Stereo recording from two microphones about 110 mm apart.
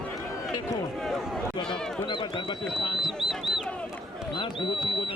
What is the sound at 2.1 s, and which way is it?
Speech, 50° left (ahead or behind).